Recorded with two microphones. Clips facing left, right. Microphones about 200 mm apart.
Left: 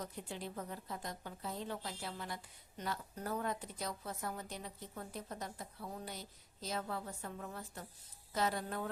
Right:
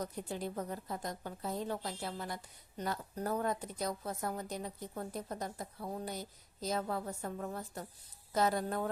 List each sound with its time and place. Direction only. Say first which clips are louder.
0.0 s a woman's voice: right 5 dB; 40° right (ahead or behind)